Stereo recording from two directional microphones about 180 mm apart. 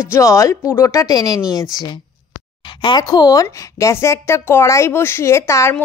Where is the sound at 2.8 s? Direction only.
25° left (ahead or behind).